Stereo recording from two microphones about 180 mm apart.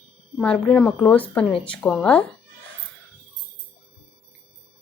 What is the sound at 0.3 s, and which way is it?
A woman's voice, 5° left (ahead or behind).